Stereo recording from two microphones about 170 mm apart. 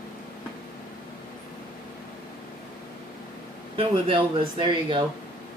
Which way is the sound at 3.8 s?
30° right (ahead or behind).